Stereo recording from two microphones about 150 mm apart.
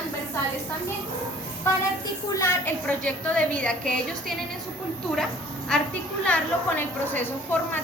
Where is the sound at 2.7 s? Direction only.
10° left (ahead or behind).